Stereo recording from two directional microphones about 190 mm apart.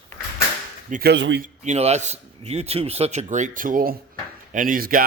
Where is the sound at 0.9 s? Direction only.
45° right (ahead or behind).